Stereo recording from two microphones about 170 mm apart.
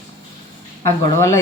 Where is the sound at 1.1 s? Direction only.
15° left (ahead or behind).